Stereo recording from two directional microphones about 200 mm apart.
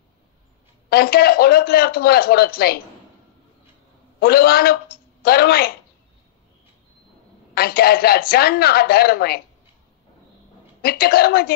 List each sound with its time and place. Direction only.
0.8 s a man's voice: 50° left (ahead or behind)
4.2 s a man's voice: 50° left (ahead or behind)
7.5 s a man's voice: 50° left (ahead or behind)
10.8 s a man's voice: 50° left (ahead or behind)